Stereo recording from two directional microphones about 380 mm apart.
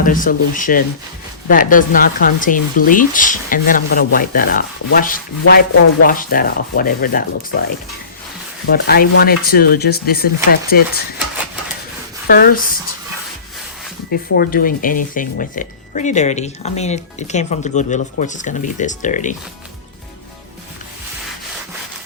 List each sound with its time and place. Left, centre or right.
0.0 s speech: left
8.6 s speech: left
12.3 s speech: left
14.1 s speech: left